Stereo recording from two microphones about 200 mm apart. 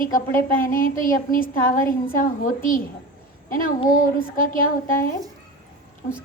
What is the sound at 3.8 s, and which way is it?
A woman's voice, 45° left (ahead or behind).